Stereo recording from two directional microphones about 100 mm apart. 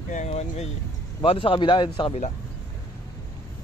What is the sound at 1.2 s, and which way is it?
Speech, 65° left (ahead or behind).